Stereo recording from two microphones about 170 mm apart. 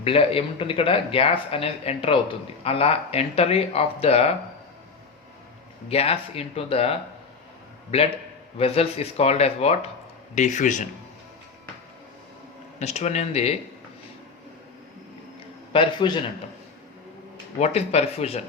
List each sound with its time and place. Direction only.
0.0 s speech: 35° left (ahead or behind)
5.9 s speech: 35° left (ahead or behind)
8.5 s speech: 35° left (ahead or behind)
12.8 s speech: 40° left (ahead or behind)
15.7 s a man's voice: 30° left (ahead or behind)
17.6 s speech: 40° left (ahead or behind)